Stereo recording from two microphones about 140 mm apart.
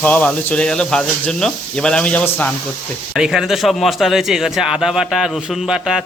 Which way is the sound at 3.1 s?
5° right (ahead or behind).